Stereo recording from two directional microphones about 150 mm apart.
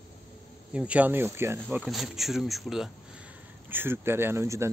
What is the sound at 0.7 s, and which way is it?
Speech, 10° right (ahead or behind).